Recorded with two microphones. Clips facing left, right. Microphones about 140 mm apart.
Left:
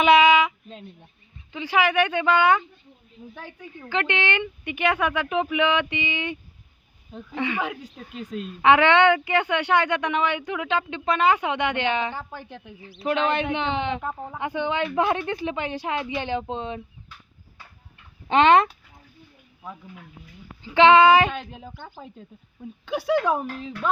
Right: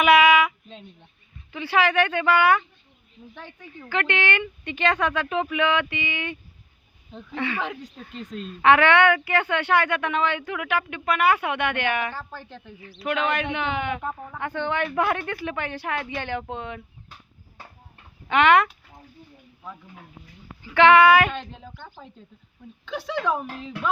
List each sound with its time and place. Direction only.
0.0 s a sound: 25° left (ahead or behind)
1.5 s a woman's voice: 15° left (ahead or behind)
7.1 s speech: 5° left (ahead or behind)
7.4 s a woman's voice: 15° left (ahead or behind)
8.7 s speech: 20° left (ahead or behind)
18.3 s speech: 25° left (ahead or behind)
20.7 s speech: 20° left (ahead or behind)
21.3 s a woman's voice: 10° left (ahead or behind)